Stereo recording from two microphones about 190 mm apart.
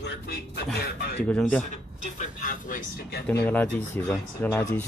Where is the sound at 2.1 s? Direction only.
45° left (ahead or behind).